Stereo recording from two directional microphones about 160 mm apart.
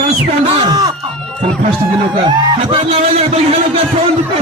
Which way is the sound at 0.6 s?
25° right (ahead or behind).